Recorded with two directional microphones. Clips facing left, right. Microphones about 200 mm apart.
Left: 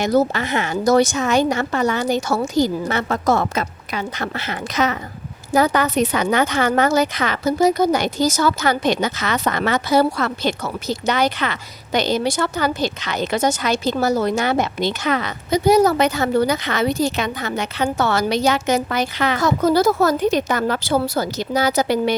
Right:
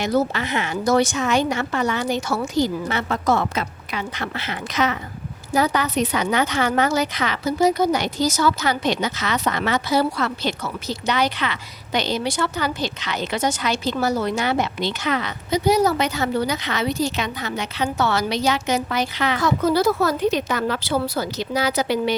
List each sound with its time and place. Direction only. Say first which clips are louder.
0.0 s a woman's voice: left 3 dB; 40° left (ahead or behind)